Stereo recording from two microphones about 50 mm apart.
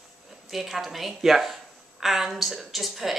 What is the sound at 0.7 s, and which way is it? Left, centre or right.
A woman's voice, centre.